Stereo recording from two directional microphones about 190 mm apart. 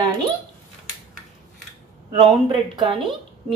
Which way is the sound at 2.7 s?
25° right (ahead or behind).